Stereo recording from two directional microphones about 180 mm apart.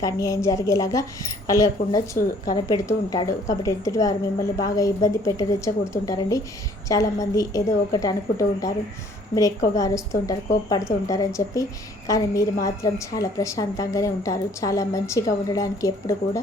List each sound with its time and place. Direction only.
0.0 s a woman's voice: 15° left (ahead or behind)
9.7 s a woman's voice: 20° left (ahead or behind)